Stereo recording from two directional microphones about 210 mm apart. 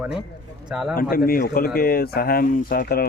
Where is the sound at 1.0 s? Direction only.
45° left (ahead or behind).